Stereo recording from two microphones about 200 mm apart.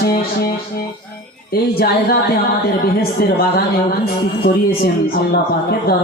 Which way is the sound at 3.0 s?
50° left (ahead or behind).